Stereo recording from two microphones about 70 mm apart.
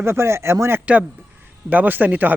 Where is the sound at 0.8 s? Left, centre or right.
Right.